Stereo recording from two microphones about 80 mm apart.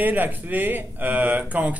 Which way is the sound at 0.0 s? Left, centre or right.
Right.